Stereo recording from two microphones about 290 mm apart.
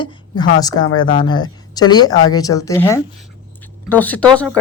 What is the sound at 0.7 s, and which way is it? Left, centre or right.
Speech, left.